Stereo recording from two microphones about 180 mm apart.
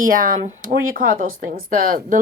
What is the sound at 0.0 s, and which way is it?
Speech, 50° right (ahead or behind).